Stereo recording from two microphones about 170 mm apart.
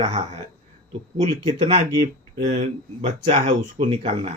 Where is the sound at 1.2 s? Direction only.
40° right (ahead or behind).